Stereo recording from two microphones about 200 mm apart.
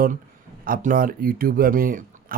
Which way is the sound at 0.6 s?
45° right (ahead or behind).